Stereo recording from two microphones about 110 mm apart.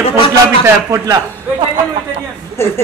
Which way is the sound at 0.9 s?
30° right (ahead or behind).